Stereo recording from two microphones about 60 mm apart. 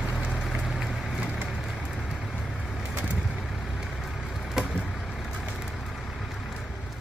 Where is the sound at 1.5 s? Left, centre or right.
Centre.